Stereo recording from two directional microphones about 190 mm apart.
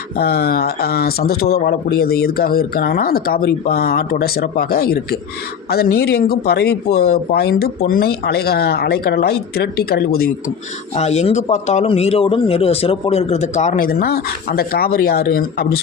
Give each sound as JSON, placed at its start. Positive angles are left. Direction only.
{"t": 0.2, "sound": "speech", "side_deg": 55}
{"t": 10.9, "sound": "a man's voice", "side_deg": 35}